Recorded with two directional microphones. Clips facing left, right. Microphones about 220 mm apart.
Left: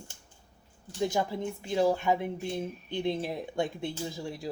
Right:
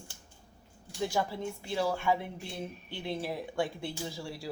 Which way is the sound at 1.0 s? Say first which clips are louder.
Left 3 dB; 20° left (ahead or behind).